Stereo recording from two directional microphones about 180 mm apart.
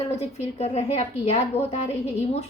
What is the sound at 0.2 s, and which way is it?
A woman's voice, 35° left (ahead or behind).